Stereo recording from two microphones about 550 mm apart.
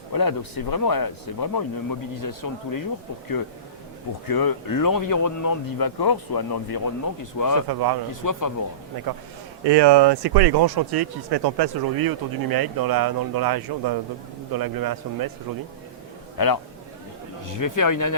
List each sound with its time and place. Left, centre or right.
0.1 s speech: left
4.3 s speech: left
7.7 s speech: right
8.2 s speech: left
9.6 s speech: right
16.4 s speech: left